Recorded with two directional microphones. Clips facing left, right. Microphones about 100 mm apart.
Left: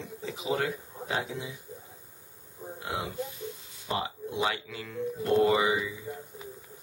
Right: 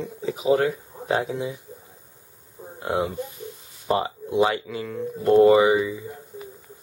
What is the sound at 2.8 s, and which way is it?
Speech, 45° right (ahead or behind).